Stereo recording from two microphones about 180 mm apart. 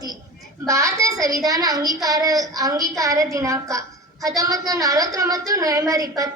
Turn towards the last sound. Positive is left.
turn(degrees=-20)  # may be behind; listen again after turning